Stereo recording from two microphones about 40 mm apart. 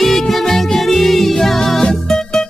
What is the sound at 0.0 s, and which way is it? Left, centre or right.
Music, centre.